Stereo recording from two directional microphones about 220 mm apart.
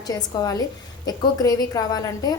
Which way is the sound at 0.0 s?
15° left (ahead or behind).